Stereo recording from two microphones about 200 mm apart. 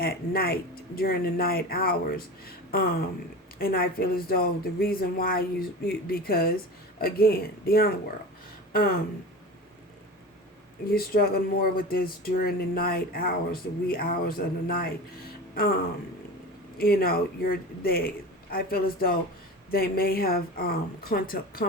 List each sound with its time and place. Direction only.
0.0 s speech: 50° left (ahead or behind)
8.7 s a sound: 45° left (ahead or behind)
10.8 s speech: 50° left (ahead or behind)
16.7 s speech: 50° left (ahead or behind)